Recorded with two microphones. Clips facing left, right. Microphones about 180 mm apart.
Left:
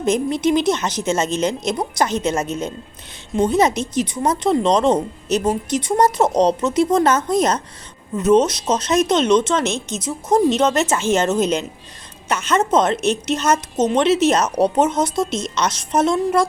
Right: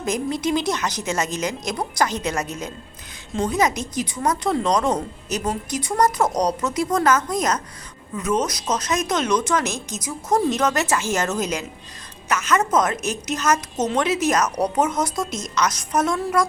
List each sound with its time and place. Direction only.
0.0 s speech: 25° left (ahead or behind)